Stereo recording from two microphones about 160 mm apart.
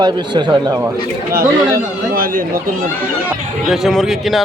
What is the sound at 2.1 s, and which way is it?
Speech, 65° right (ahead or behind).